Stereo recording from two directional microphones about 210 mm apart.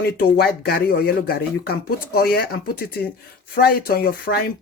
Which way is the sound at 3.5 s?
45° left (ahead or behind).